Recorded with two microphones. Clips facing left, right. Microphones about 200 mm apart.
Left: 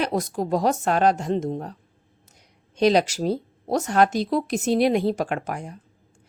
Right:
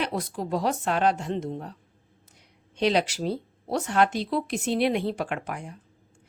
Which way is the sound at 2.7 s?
40° left (ahead or behind).